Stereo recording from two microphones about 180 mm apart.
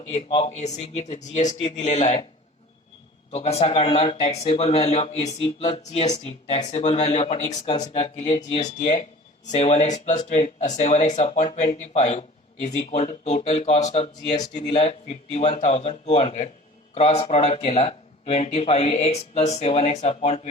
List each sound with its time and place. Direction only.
0.0 s speech: 35° left (ahead or behind)
3.3 s speech: 35° left (ahead or behind)